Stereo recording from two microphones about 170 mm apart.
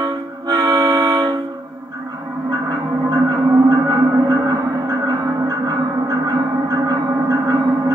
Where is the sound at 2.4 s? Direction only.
25° right (ahead or behind).